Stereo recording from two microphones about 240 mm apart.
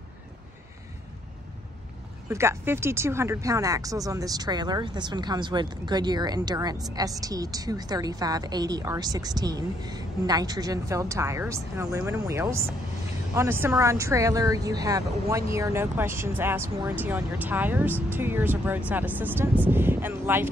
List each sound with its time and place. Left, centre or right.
2.2 s a woman's voice: centre